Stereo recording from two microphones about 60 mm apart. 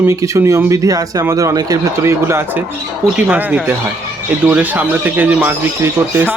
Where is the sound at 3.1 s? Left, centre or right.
Right.